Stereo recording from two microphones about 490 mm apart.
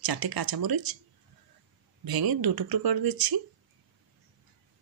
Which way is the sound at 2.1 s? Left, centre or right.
Right.